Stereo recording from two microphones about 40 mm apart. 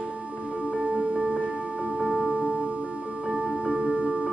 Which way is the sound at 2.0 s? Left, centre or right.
Right.